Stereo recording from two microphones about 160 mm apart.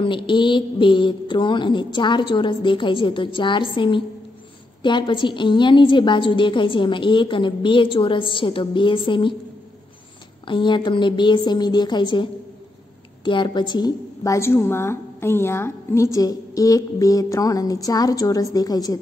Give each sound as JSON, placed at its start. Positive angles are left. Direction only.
{"t": 0.0, "sound": "a woman's voice", "side_deg": 30}
{"t": 10.4, "sound": "a woman's voice", "side_deg": 30}